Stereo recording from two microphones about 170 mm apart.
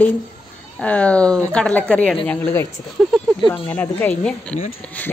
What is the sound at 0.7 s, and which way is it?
Speech, 5° left (ahead or behind).